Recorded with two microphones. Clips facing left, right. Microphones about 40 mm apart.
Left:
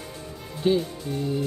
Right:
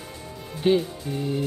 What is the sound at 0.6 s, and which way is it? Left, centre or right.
Speech, right.